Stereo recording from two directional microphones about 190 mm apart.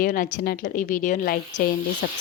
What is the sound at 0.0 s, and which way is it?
A woman's voice, 45° left (ahead or behind).